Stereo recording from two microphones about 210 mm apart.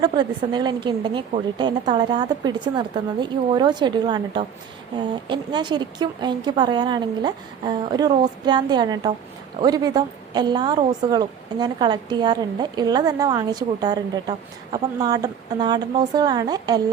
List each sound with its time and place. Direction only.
0.0 s a woman's voice: 20° right (ahead or behind)